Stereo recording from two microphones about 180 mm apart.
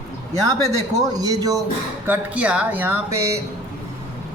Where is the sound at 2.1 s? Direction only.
5° right (ahead or behind).